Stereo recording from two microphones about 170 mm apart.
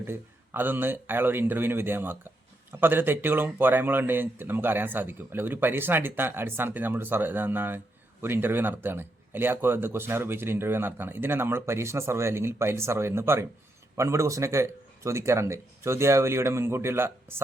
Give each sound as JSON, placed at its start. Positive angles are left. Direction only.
{"t": 0.0, "sound": "speech", "side_deg": -10}